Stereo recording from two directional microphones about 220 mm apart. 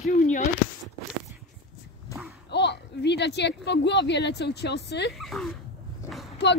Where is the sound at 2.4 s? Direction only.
50° left (ahead or behind).